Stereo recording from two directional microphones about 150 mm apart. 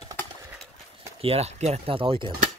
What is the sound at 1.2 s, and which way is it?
Speech, 45° right (ahead or behind).